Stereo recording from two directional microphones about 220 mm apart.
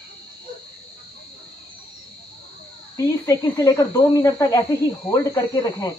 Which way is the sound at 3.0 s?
15° left (ahead or behind).